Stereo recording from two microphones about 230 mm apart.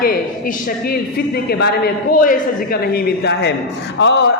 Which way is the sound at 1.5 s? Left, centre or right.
Left.